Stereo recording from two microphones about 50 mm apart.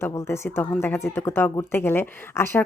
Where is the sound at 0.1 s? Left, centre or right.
Left.